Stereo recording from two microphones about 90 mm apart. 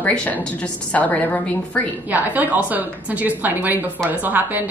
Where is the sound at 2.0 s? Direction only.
20° right (ahead or behind).